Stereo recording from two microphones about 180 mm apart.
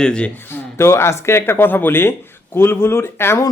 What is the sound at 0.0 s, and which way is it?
A man's voice, 5° left (ahead or behind).